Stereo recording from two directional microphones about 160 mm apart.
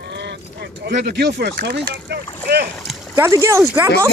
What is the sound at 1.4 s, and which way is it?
Speech, 80° right.